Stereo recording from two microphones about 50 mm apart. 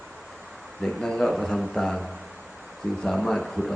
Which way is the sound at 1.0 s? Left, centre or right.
Centre.